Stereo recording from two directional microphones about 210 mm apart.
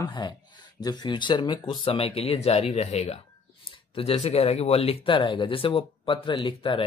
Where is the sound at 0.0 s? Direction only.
20° left (ahead or behind).